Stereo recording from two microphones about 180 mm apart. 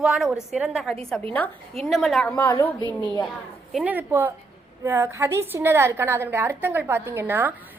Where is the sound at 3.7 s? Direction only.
10° right (ahead or behind).